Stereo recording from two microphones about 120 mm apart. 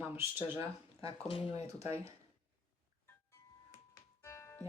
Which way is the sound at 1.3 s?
45° left (ahead or behind).